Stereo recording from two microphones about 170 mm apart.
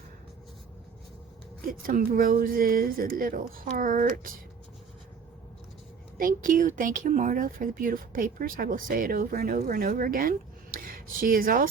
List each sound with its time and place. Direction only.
1.6 s speech: 55° right (ahead or behind)
6.1 s speech: 55° right (ahead or behind)